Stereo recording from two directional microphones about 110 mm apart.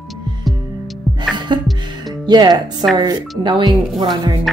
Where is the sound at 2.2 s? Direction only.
40° right (ahead or behind).